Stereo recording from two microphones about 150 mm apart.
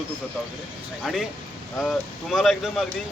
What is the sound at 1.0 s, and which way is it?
Speech, centre (ahead or behind).